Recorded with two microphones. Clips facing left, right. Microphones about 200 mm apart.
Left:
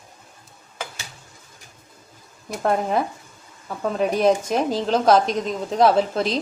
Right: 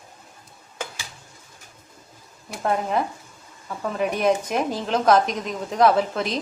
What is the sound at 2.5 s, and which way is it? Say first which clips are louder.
A woman's voice: left 2 dB; 40° left (ahead or behind).